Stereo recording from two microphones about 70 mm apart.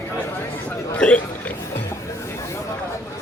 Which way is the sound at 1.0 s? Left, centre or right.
Centre.